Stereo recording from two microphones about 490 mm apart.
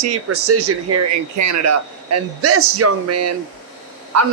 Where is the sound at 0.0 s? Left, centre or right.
Right.